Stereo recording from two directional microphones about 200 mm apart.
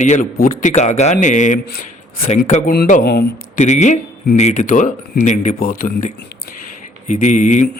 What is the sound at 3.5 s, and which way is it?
A man's voice, 35° left (ahead or behind).